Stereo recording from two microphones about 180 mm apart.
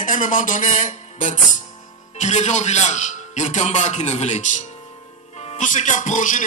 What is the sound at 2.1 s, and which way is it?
A man's voice, 40° left (ahead or behind).